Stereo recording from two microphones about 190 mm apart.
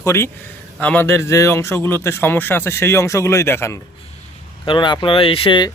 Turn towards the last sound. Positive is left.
turn(degrees=25)  # may be behind; listen again after turning